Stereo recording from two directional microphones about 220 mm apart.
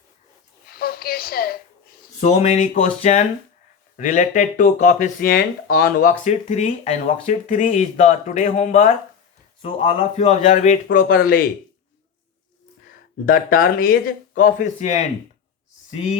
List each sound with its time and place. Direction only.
0.7 s a sound: 45° left (ahead or behind)
2.2 s speech: 30° left (ahead or behind)
13.2 s speech: 40° left (ahead or behind)